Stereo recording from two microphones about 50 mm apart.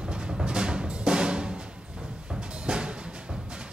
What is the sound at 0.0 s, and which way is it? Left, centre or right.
Timpani, centre.